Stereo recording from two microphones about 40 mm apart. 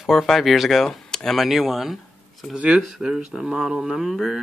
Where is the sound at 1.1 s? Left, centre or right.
Centre.